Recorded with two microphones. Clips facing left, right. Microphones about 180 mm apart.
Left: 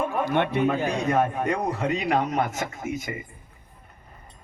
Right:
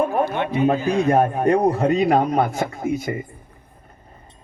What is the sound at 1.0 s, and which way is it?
A man's voice, 35° right (ahead or behind).